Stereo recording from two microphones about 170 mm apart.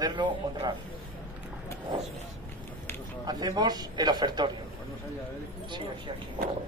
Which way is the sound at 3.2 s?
25° right (ahead or behind).